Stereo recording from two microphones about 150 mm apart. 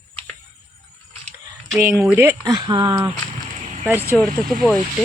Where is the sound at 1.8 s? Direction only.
10° right (ahead or behind).